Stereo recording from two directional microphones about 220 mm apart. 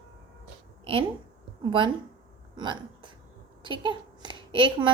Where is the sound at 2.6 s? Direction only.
20° right (ahead or behind).